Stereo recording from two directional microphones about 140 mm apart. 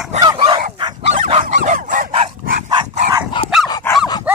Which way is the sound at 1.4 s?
65° right (ahead or behind).